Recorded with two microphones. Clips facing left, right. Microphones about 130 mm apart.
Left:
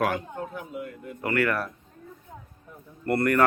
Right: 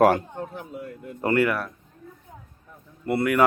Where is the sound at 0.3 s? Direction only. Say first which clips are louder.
Even; 35° right (ahead or behind).